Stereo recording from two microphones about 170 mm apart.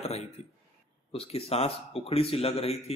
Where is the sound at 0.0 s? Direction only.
40° left (ahead or behind).